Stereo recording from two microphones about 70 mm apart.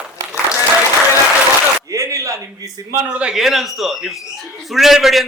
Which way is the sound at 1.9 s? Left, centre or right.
Right.